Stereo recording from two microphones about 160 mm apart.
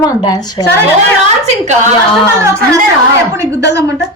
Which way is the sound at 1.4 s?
45° right (ahead or behind).